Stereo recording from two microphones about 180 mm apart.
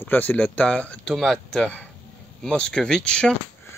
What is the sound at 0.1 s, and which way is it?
Speech, 10° left (ahead or behind).